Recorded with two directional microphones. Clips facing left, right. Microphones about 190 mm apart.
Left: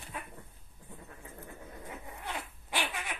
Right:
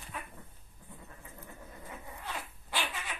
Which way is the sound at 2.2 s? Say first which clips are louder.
Left 2 dB; 15° left (ahead or behind).